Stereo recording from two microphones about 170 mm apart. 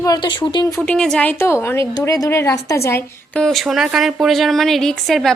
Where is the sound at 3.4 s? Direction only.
Centre (ahead or behind).